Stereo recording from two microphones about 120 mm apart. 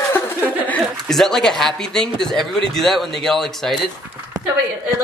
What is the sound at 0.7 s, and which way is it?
Speech, 5° left (ahead or behind).